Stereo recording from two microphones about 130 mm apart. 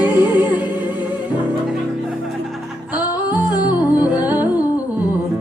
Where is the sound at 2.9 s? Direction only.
30° left (ahead or behind).